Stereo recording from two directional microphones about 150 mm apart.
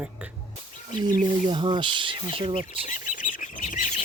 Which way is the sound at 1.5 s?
30° right (ahead or behind).